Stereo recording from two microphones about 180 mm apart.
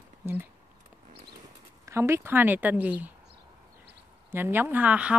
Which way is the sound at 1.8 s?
15° right (ahead or behind).